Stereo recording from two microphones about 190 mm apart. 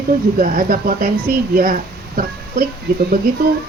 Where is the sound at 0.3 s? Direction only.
45° right (ahead or behind).